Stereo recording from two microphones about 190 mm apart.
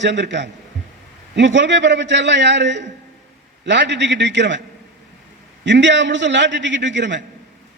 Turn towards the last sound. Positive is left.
turn(degrees=-70)  # may be behind; listen again after turning